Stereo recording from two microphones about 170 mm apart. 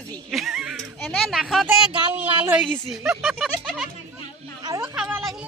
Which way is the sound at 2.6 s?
5° left (ahead or behind).